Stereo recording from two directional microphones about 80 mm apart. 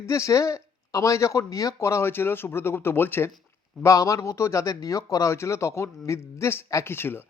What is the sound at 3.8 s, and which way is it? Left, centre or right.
A man's voice, left.